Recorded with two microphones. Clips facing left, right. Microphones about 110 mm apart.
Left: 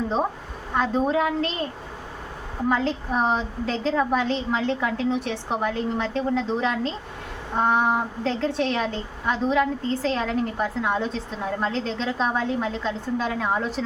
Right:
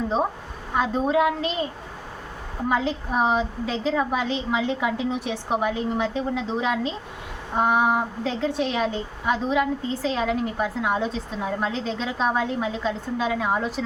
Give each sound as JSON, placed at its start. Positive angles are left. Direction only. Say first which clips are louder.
{"t": 0.7, "sound": "a woman's voice", "louder": "even", "side_deg": -5}